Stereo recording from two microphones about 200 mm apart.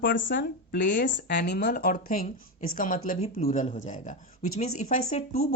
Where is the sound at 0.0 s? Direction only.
65° left (ahead or behind).